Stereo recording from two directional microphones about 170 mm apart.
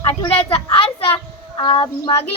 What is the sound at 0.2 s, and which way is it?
A child's voice, 35° left (ahead or behind).